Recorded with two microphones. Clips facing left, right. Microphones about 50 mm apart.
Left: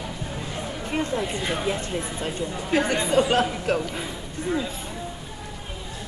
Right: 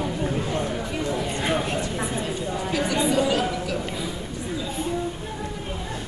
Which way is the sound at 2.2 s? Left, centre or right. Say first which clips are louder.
Right 1 dB; left.